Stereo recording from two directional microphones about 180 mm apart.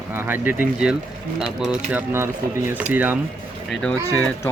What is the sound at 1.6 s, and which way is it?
Speech, 5° right (ahead or behind).